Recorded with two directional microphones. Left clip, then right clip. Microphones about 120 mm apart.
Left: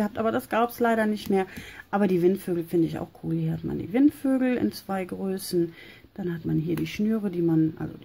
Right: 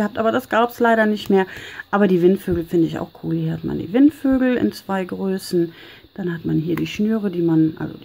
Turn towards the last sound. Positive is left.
turn(degrees=-15)  # may be behind; listen again after turning